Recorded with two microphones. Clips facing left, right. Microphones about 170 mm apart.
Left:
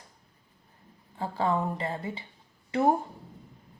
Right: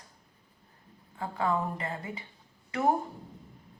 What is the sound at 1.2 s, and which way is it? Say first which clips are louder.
Speech: left 2 dB; 30° left (ahead or behind).